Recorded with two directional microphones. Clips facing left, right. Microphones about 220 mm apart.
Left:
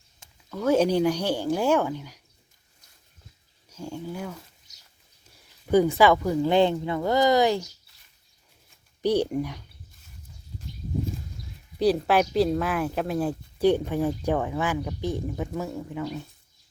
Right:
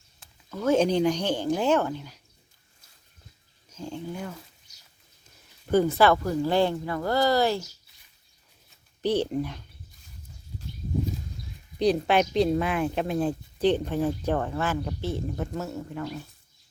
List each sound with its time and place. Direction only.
0.7 s speech: 10° left (ahead or behind)
3.7 s speech: 10° left (ahead or behind)
6.0 s speech: 15° left (ahead or behind)
9.0 s speech: 15° left (ahead or behind)
11.8 s speech: 5° left (ahead or behind)